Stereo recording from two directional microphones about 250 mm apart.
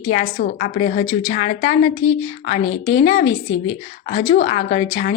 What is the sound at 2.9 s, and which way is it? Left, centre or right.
Speech, left.